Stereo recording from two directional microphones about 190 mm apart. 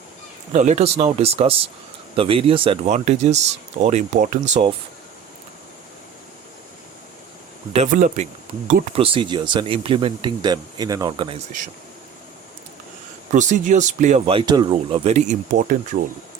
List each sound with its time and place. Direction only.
0.5 s speech: 40° right (ahead or behind)
7.7 s speech: 40° right (ahead or behind)
9.0 s speech: 30° right (ahead or behind)
13.3 s speech: 40° right (ahead or behind)